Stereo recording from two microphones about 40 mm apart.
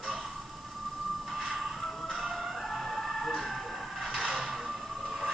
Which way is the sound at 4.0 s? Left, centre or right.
Centre.